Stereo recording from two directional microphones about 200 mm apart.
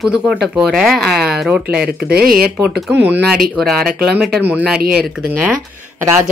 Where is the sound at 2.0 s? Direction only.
50° right (ahead or behind).